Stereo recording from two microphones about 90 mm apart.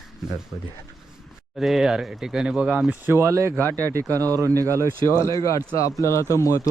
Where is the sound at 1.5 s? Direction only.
5° right (ahead or behind).